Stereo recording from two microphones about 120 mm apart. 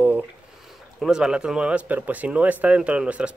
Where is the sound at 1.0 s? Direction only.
5° right (ahead or behind).